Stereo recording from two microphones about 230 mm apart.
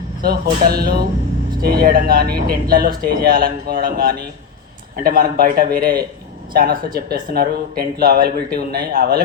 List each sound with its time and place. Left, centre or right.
0.2 s speech: right